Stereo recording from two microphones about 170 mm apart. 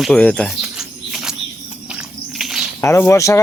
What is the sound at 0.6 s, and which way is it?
Chirp, 5° right (ahead or behind).